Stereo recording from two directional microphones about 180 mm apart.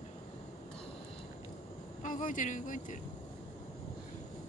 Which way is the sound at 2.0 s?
45° left (ahead or behind).